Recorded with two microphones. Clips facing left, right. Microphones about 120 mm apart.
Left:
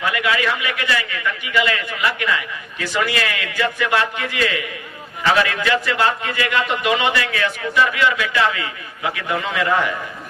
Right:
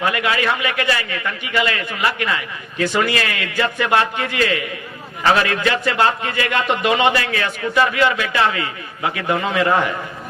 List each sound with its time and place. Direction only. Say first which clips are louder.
0.0 s a man's voice: right 1 dB; 30° right (ahead or behind)